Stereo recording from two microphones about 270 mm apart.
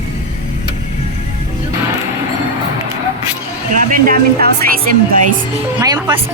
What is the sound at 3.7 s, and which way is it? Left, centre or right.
Speech, right.